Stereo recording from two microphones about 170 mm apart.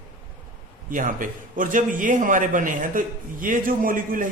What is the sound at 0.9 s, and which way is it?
A man's voice, 50° right (ahead or behind).